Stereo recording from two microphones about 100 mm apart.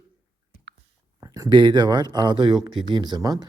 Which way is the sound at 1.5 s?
50° right (ahead or behind).